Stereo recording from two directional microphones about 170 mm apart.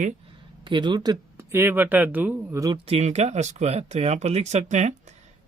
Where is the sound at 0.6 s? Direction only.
25° right (ahead or behind).